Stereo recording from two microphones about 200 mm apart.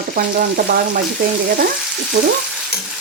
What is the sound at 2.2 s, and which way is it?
Speech, 50° right (ahead or behind).